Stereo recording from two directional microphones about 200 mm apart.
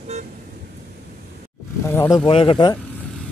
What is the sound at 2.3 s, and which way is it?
Speech, 25° left (ahead or behind).